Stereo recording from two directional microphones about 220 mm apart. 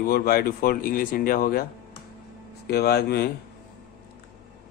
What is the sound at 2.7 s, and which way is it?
Speech, 45° left (ahead or behind).